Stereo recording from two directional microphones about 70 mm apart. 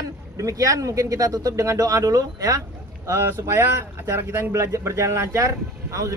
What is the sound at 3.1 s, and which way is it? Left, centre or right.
Speech, right.